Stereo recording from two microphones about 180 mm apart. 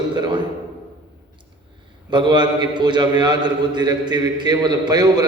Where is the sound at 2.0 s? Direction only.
25° right (ahead or behind).